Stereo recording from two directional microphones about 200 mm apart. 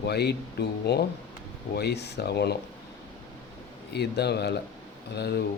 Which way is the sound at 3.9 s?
55° left (ahead or behind).